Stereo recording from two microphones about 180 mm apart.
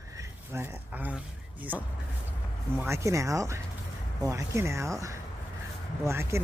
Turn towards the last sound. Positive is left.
turn(degrees=-15)  # may be behind; listen again after turning